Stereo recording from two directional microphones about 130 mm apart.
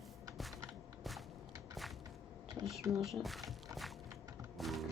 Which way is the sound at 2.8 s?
25° right (ahead or behind).